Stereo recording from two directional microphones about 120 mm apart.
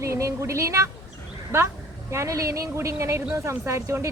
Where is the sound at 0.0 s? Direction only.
25° right (ahead or behind).